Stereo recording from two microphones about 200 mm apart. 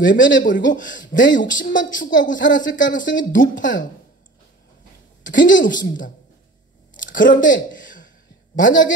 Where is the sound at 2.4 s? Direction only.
40° left (ahead or behind).